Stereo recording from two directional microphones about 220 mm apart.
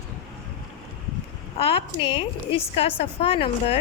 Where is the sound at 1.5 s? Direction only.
25° left (ahead or behind).